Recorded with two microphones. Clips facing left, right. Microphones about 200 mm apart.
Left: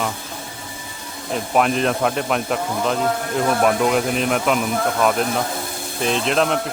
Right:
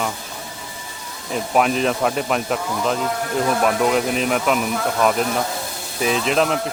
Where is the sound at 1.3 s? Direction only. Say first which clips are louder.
Even; centre (ahead or behind).